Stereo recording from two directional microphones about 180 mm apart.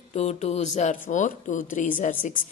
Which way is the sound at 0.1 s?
40° left (ahead or behind).